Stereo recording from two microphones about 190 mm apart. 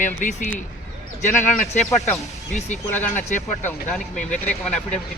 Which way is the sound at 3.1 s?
40° left (ahead or behind).